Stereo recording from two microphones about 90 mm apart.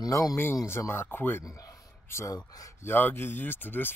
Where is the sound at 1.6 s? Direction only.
35° left (ahead or behind).